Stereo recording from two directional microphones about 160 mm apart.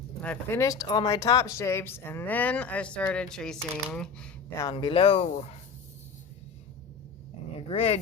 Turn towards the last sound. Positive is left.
turn(degrees=40)  # may be behind; listen again after turning